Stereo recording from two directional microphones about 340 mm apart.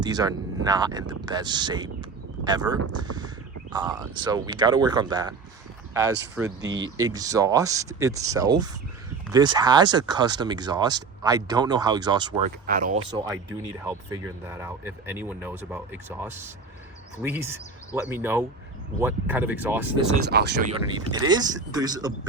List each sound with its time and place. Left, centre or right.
0.0 s speech: centre
3.0 s crow: centre
4.2 s speech: centre
6.4 s speech: right
6.9 s speech: centre
12.6 s speech: right; by 19.9 s centre
20.2 s speech: right
21.1 s speech: centre